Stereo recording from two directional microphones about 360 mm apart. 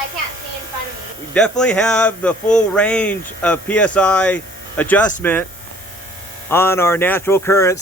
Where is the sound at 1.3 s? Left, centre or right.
Centre.